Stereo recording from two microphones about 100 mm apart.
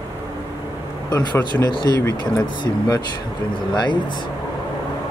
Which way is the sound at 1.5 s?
45° left (ahead or behind).